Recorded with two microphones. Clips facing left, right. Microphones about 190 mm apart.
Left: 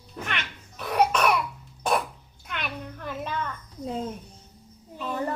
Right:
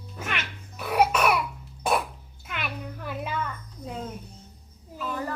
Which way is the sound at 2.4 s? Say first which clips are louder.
Even; 5° right (ahead or behind).